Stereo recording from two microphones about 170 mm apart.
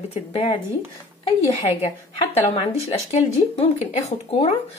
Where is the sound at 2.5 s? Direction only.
35° left (ahead or behind).